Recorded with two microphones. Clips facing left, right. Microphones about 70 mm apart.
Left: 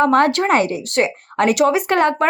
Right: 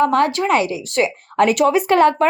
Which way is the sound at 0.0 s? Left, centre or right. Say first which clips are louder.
Left 1 dB; left.